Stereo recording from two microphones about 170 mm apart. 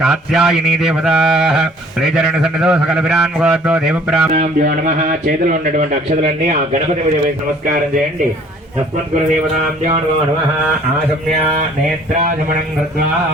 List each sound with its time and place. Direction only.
0.0 s mantra: 5° right (ahead or behind)
4.3 s a man's voice: 50° right (ahead or behind)